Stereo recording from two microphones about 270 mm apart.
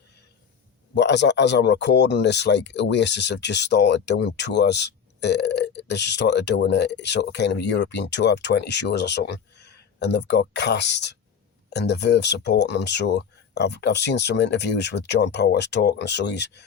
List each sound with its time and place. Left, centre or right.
0.9 s speech: left